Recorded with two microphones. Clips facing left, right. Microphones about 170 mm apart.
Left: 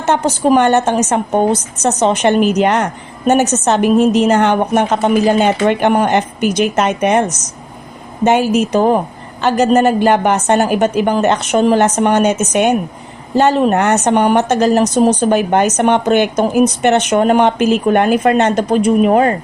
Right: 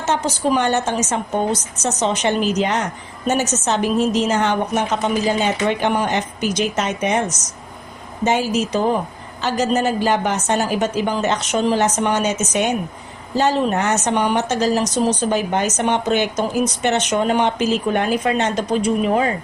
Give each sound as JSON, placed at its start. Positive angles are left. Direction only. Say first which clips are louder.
{"t": 0.0, "sound": "a woman's voice", "louder": "left 6 dB", "side_deg": 60}